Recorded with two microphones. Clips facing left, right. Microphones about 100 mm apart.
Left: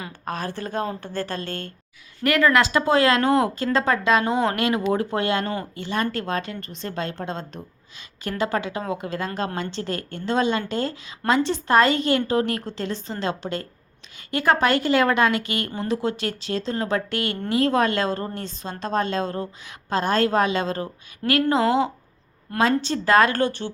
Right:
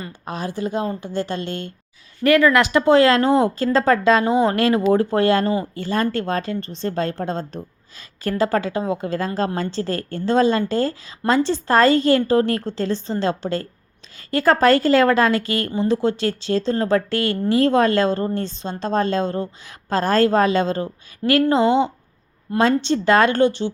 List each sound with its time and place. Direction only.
0.3 s a woman's voice: 15° right (ahead or behind); by 8.8 s 40° right (ahead or behind)
8.8 s a woman's voice: 30° right (ahead or behind)